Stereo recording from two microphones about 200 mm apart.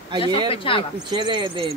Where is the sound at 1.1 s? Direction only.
25° right (ahead or behind).